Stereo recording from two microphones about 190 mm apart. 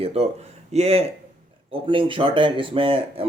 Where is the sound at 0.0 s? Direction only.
30° right (ahead or behind).